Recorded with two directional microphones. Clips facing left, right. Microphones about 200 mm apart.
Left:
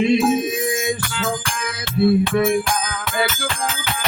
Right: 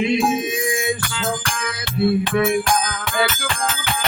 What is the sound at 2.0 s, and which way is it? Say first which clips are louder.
Music: left 2 dB; 25° left (ahead or behind).